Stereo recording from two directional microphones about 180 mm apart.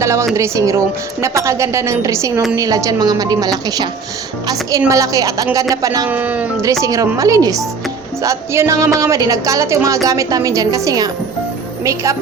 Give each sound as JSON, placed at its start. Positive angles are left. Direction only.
{"t": 0.0, "sound": "a woman's voice", "side_deg": -15}
{"t": 4.9, "sound": "a woman's voice", "side_deg": -20}
{"t": 6.1, "sound": "a woman's voice", "side_deg": -10}